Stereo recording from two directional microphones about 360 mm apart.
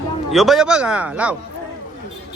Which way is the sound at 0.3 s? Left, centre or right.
Centre.